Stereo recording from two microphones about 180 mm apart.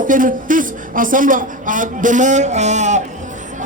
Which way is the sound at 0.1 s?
45° right (ahead or behind).